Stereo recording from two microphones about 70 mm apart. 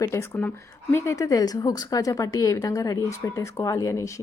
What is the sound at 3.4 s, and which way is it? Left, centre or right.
Speech, left.